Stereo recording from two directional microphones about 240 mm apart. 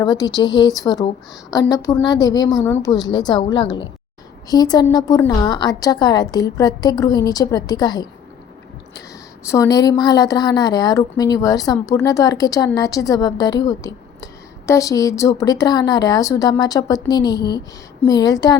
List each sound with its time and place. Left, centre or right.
0.0 s a woman's voice: centre